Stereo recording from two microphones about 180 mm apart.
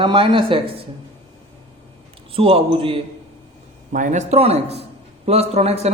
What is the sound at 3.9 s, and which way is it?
A man's voice, 45° right (ahead or behind).